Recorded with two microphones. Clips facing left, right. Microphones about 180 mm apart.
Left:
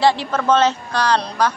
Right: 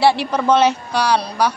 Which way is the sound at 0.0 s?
10° right (ahead or behind).